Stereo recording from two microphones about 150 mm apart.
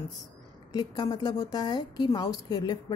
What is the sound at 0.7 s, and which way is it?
A woman's voice, 25° left (ahead or behind).